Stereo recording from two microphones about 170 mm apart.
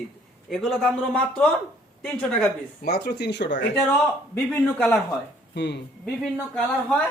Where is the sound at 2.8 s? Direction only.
70° left (ahead or behind); by 3.7 s 90° left.